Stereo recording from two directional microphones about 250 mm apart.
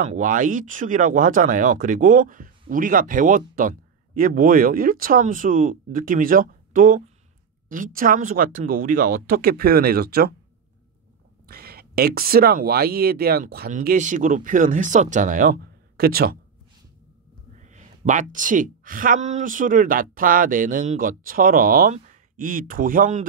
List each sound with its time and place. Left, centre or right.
0.0 s a woman's voice: right
11.4 s a woman's voice: right
17.6 s a woman's voice: right